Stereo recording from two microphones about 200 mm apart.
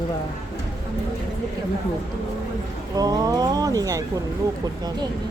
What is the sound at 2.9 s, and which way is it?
Speech, 20° right (ahead or behind).